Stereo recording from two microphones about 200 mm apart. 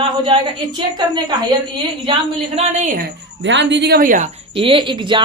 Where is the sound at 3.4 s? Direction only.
65° right (ahead or behind); by 4.3 s 45° right (ahead or behind).